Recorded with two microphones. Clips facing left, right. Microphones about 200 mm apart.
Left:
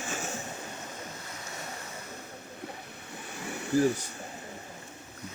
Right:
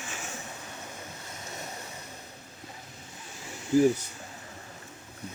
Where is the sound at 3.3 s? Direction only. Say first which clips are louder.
Left 7 dB; 60° left (ahead or behind).